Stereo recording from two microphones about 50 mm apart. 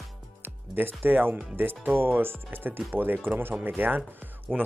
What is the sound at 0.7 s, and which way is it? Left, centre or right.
Speech, right.